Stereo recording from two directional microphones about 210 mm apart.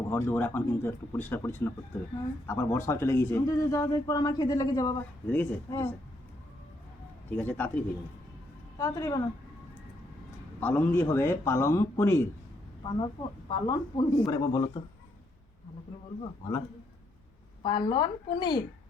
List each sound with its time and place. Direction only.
0.1 s speech: 10° left (ahead or behind)
7.3 s speech: 10° left (ahead or behind)
10.6 s speech: 10° left (ahead or behind)
17.6 s speech: 25° left (ahead or behind)